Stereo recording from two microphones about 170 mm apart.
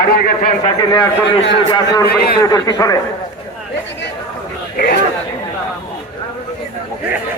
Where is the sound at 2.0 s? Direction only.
65° left (ahead or behind).